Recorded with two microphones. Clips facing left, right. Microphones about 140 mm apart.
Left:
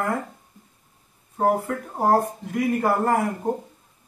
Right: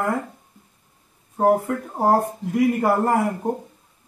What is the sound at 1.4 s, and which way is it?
Speech, 20° right (ahead or behind).